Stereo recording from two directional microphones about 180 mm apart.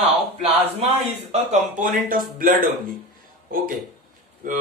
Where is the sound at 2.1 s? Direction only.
50° right (ahead or behind).